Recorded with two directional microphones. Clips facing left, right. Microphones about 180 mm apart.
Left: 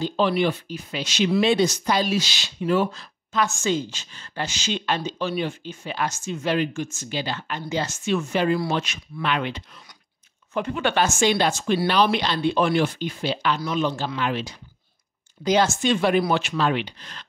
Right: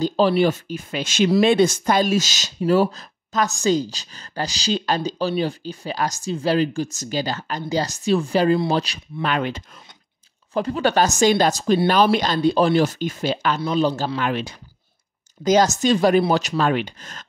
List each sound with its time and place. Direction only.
0.0 s speech: 35° right (ahead or behind)
13.6 s speech: 35° right (ahead or behind); by 14.6 s 55° right (ahead or behind)
15.4 s speech: 40° right (ahead or behind)